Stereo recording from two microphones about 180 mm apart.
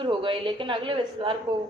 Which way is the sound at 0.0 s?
30° right (ahead or behind).